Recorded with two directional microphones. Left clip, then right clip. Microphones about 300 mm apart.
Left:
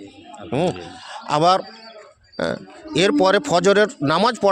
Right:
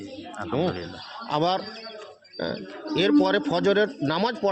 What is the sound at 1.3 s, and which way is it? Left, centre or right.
Speech, left.